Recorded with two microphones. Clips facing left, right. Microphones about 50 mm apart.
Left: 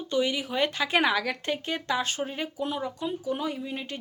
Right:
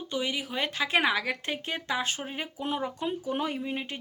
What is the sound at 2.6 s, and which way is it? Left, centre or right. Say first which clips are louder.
Speech: right 1 dB; right.